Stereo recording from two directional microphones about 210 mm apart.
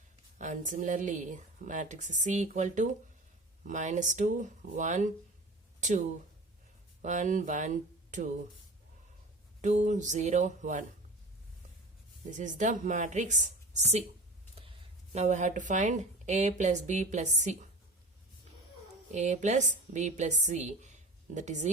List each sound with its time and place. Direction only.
0.3 s speech: 35° right (ahead or behind)
7.0 s speech: 35° right (ahead or behind)
9.6 s speech: 35° right (ahead or behind)
12.4 s speech: 35° right (ahead or behind)
19.1 s a woman's voice: 35° right (ahead or behind)